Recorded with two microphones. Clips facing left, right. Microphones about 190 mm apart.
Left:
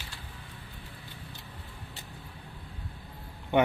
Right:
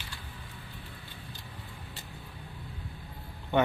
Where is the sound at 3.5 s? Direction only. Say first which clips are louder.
Left 2 dB; 15° left (ahead or behind).